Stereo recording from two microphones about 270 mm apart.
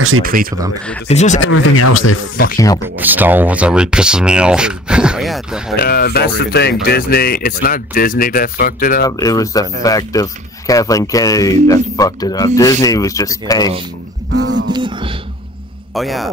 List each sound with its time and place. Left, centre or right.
0.2 s a sound: right
1.0 s speech: left
1.4 s speech: left
2.4 s speech: left
3.0 s speech: centre
5.8 s speech: left
9.0 s speech: centre
14.3 s a sound: right
14.7 s a sound: centre
15.9 s speech: centre